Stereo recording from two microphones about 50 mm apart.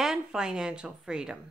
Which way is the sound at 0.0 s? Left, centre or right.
Centre.